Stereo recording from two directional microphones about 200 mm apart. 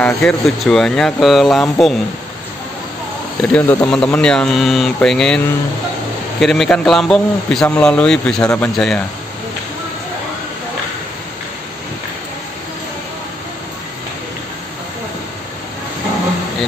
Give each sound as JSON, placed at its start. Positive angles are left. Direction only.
{"t": 0.0, "sound": "a man's voice", "side_deg": 5}
{"t": 3.5, "sound": "a man's voice", "side_deg": 5}
{"t": 6.4, "sound": "a man's voice", "side_deg": 5}